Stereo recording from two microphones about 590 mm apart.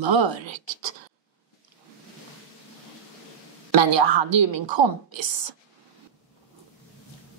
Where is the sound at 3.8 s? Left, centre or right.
Right.